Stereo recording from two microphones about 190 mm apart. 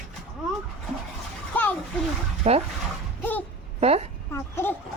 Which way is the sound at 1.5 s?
10° left (ahead or behind).